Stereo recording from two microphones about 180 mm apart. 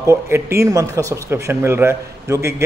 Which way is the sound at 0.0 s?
15° right (ahead or behind).